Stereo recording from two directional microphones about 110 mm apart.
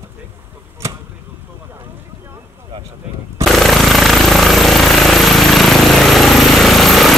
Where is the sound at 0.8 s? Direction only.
25° right (ahead or behind).